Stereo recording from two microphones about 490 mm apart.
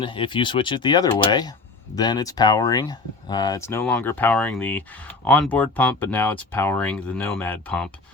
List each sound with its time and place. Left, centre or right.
0.0 s speech: centre